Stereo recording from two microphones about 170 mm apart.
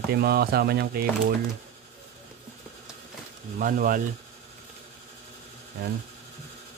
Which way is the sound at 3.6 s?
55° right (ahead or behind).